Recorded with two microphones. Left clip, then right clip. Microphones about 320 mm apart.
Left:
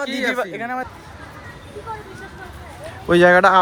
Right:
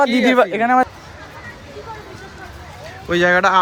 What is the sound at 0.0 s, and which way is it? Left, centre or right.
Speech, right.